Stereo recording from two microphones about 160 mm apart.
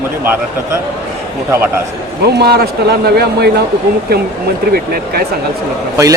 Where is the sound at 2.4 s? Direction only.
80° right.